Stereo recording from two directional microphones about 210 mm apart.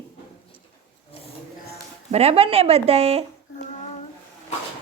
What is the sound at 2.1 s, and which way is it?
Speech, 30° right (ahead or behind).